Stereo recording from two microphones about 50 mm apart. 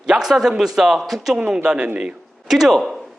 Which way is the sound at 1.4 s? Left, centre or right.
Centre.